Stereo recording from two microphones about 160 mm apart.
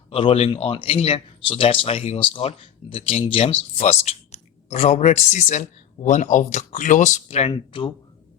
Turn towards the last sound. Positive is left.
turn(degrees=35)  # may be behind; listen again after turning